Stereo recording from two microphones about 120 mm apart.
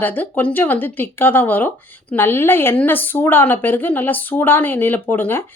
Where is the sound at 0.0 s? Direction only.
15° left (ahead or behind).